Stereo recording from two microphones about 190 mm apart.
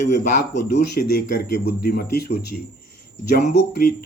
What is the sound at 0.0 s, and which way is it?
Speech, 40° left (ahead or behind).